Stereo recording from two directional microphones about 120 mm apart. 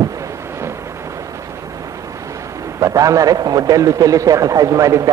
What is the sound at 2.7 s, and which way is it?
A man's voice, 30° right (ahead or behind).